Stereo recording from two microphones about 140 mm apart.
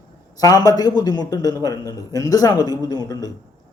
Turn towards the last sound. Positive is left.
turn(degrees=25)  # may be behind; listen again after turning